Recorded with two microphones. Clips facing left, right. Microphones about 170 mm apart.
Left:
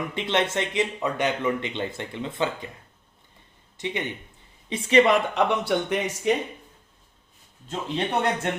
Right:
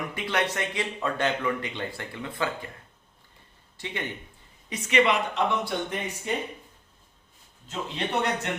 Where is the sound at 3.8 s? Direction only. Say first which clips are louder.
Left 5 dB; 20° left (ahead or behind).